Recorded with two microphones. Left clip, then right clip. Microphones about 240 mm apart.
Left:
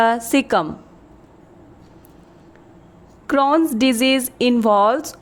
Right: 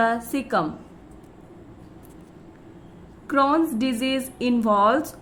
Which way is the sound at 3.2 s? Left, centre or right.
Left.